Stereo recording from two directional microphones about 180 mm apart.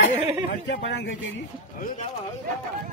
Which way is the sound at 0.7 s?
80° left.